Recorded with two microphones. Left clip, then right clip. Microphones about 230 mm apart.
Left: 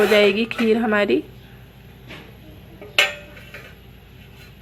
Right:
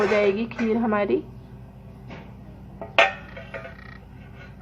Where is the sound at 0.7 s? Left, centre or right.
Left.